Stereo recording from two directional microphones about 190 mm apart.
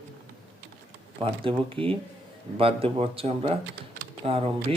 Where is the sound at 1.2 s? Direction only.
30° right (ahead or behind).